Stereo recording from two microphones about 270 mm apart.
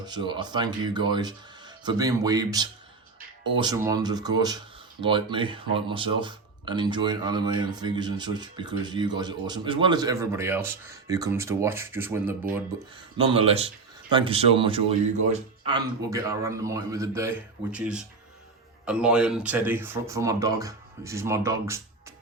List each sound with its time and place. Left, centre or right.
0.0 s speech: centre
13.1 s speech: centre